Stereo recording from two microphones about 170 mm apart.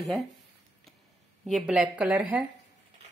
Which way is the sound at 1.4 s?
Centre (ahead or behind).